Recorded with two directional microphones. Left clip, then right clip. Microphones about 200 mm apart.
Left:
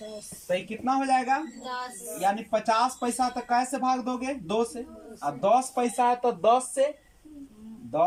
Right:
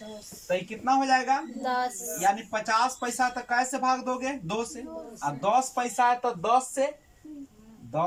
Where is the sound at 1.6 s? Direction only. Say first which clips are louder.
Right 6 dB; 40° right (ahead or behind).